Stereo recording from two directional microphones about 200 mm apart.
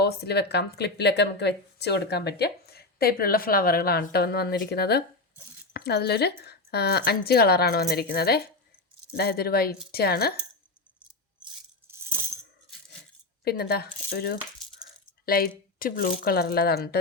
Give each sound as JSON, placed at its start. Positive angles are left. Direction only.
{"t": 0.0, "sound": "speech", "side_deg": 55}
{"t": 13.4, "sound": "speech", "side_deg": 50}